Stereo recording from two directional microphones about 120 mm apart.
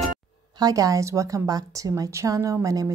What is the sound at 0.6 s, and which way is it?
A woman's voice, 30° right (ahead or behind).